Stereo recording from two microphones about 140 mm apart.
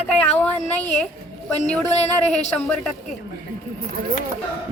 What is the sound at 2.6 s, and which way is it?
Speech, 5° left (ahead or behind).